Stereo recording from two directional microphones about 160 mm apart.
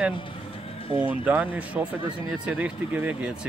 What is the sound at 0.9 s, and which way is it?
Speech, 35° left (ahead or behind).